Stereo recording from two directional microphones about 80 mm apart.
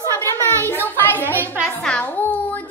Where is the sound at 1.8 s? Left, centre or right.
Centre.